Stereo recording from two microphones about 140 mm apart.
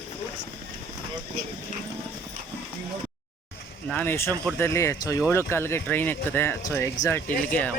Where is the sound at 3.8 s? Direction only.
15° left (ahead or behind).